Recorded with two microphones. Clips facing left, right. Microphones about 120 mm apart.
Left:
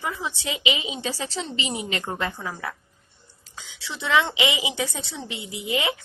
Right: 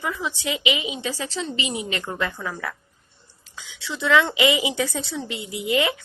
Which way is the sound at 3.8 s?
25° left (ahead or behind).